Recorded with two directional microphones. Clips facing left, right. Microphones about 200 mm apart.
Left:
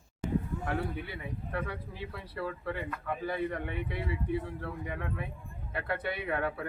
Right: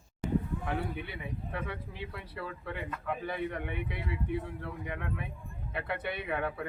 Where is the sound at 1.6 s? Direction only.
Centre (ahead or behind).